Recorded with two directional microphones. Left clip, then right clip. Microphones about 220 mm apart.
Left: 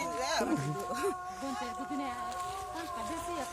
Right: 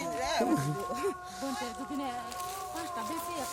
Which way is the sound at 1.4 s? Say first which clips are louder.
Right 3 dB; 35° right (ahead or behind).